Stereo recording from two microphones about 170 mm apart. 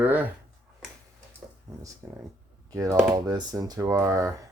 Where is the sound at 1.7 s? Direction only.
15° right (ahead or behind).